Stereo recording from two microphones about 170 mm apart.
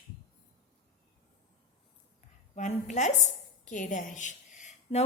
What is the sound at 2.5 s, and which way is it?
A woman's voice, 45° left (ahead or behind).